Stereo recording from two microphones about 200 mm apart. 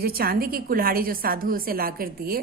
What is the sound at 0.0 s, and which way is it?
A woman's voice, 50° right (ahead or behind).